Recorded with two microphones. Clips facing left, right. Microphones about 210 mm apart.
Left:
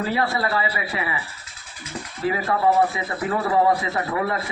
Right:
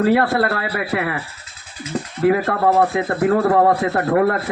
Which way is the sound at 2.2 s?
60° right (ahead or behind).